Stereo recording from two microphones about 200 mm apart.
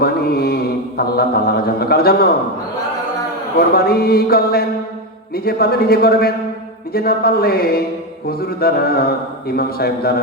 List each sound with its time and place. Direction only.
0.0 s mantra: 50° left (ahead or behind)
3.8 s mantra: 50° left (ahead or behind)